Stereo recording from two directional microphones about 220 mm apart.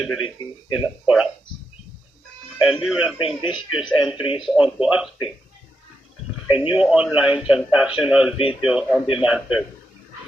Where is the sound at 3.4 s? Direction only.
20° left (ahead or behind).